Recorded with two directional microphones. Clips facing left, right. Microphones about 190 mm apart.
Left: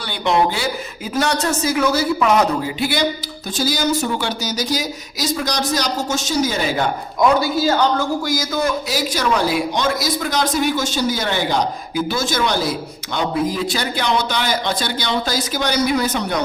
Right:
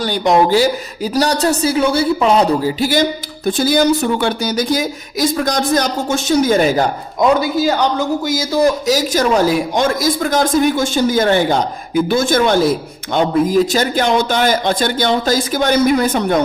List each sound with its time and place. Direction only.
0.0 s a woman's voice: 40° right (ahead or behind)
7.2 s a woman's voice: 20° right (ahead or behind); by 16.4 s 50° right (ahead or behind)